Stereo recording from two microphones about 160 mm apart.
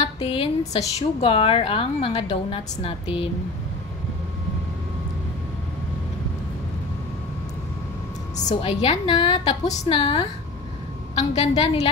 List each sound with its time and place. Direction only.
0.2 s a woman's voice: 35° left (ahead or behind)
8.6 s a woman's voice: 35° left (ahead or behind)